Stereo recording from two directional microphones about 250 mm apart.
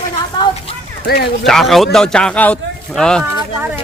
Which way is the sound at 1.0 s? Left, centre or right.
Left.